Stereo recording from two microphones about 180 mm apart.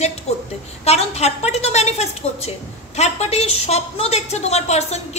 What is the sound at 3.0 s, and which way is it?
A woman's voice, 35° left (ahead or behind).